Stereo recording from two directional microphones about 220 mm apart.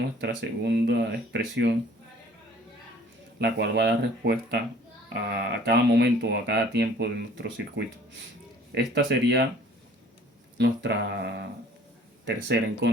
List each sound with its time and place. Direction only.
0.2 s speech: 50° right (ahead or behind)
3.3 s speech: 50° right (ahead or behind)
10.6 s speech: 50° right (ahead or behind)